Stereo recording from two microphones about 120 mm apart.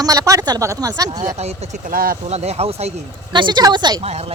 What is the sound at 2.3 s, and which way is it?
Speech, 60° right (ahead or behind).